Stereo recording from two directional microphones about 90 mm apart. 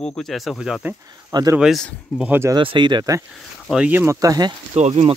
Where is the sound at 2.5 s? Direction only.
65° right (ahead or behind).